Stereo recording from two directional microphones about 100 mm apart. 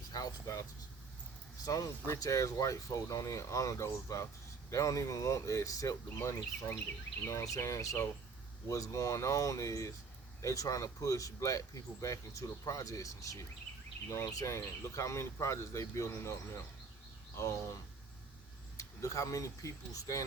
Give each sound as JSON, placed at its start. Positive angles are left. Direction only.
{"t": 0.1, "sound": "speech", "side_deg": 40}
{"t": 1.6, "sound": "speech", "side_deg": 40}
{"t": 18.8, "sound": "speech", "side_deg": 35}